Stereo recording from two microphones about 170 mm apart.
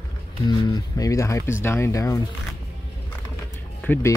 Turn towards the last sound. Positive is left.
turn(degrees=15)  # may be behind; listen again after turning